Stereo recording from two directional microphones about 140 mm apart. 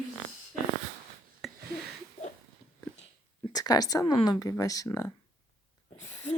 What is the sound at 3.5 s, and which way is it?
A woman's voice, 30° left (ahead or behind).